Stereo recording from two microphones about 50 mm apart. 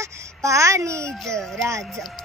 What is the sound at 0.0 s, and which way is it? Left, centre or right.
Babbling, right.